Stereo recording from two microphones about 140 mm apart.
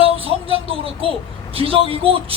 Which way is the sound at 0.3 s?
40° right (ahead or behind).